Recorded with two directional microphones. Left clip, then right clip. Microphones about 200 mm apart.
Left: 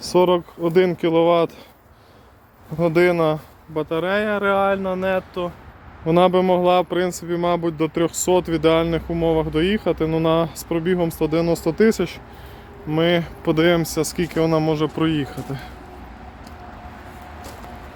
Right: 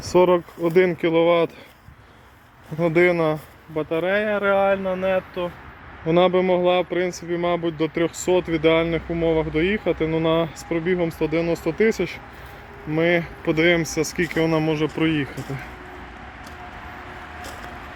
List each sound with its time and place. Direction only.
0.0 s speech: 5° right (ahead or behind)
2.7 s speech: 5° left (ahead or behind)
14.8 s speech: 15° left (ahead or behind)